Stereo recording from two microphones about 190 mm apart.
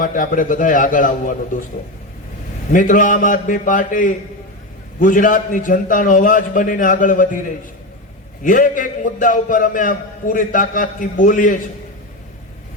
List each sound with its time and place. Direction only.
0.0 s a man's voice: 45° left (ahead or behind)
2.7 s a man's voice: 45° left (ahead or behind)
8.4 s a man's voice: 45° left (ahead or behind)